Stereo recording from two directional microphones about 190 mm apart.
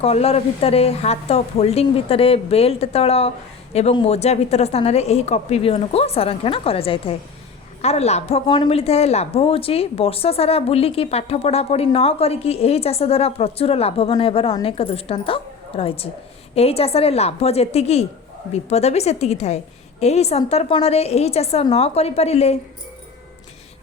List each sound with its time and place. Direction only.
0.0 s a woman's voice: 30° left (ahead or behind)